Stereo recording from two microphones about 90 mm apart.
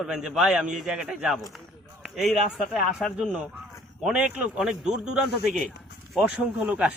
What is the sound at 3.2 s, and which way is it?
A man's voice, 5° right (ahead or behind).